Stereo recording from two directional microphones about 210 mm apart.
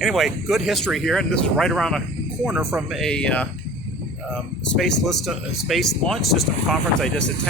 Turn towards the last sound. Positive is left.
turn(degrees=5)  # may be behind; listen again after turning